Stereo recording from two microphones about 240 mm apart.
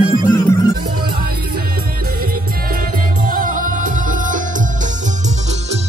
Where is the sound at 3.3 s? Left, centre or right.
Right.